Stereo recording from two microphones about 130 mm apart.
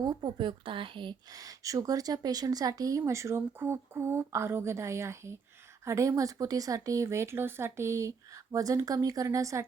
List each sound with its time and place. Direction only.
0.0 s speech: 35° right (ahead or behind)